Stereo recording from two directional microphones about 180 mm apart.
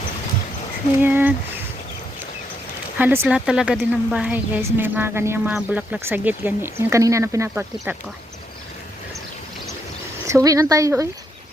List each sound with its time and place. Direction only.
1.0 s a woman's voice: 10° right (ahead or behind)
3.0 s a woman's voice: 10° right (ahead or behind)
10.2 s a woman's voice: 15° right (ahead or behind)